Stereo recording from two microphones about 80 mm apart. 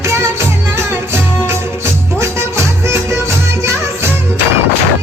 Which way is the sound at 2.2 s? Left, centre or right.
Right.